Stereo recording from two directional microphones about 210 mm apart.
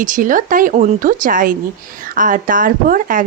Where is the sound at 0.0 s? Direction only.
40° right (ahead or behind).